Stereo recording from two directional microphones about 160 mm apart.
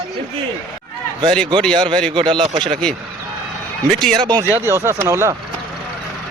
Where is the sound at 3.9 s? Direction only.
5° left (ahead or behind).